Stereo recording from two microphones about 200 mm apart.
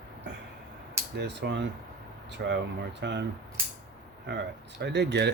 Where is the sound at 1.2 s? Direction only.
60° right (ahead or behind).